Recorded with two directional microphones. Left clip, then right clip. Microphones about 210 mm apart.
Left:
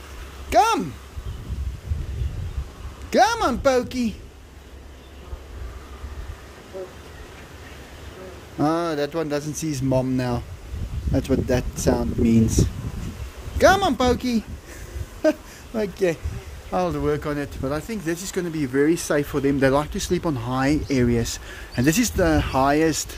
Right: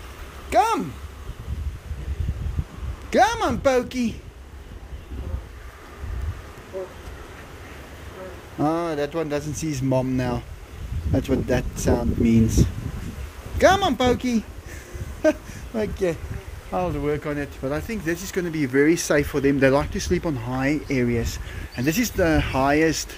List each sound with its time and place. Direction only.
0.5 s a sound: 20° left (ahead or behind)
3.1 s speech: 10° left (ahead or behind)
8.5 s speech: 15° left (ahead or behind)
16.7 s speech: 25° left (ahead or behind); by 23.0 s 10° left (ahead or behind)